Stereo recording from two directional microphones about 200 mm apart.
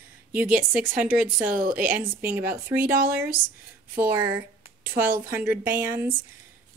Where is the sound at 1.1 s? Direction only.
45° right (ahead or behind).